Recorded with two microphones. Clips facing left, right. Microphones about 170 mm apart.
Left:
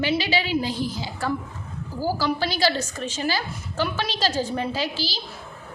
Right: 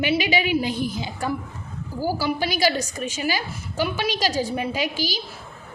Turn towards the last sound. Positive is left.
turn(degrees=-15)  # may be behind; listen again after turning